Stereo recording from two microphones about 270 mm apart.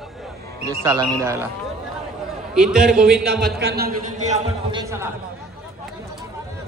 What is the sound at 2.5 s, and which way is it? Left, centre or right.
Speech, centre.